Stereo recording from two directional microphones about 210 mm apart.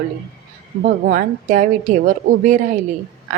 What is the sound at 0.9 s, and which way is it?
A woman's voice, 40° right (ahead or behind).